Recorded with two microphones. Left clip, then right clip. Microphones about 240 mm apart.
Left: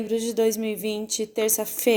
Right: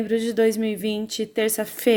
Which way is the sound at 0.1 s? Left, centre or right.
Right.